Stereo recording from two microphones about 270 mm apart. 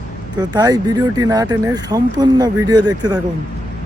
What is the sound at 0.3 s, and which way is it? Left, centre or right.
Speech, centre.